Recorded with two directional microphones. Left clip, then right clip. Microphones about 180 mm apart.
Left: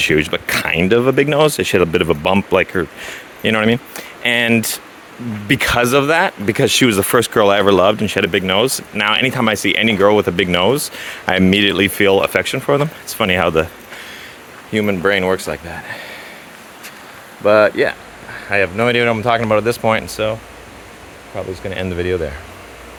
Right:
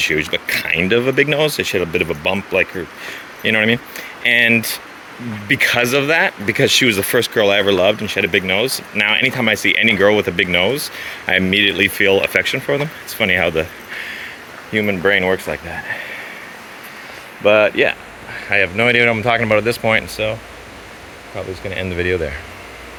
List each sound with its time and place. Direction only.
0.0 s speech: 40° left (ahead or behind)
14.7 s speech: 25° left (ahead or behind)
17.6 s speech: 10° right (ahead or behind)
18.4 s speech: 10° left (ahead or behind); by 20.1 s 25° left (ahead or behind)
21.3 s speech: 35° left (ahead or behind)
21.9 s speech: 15° left (ahead or behind)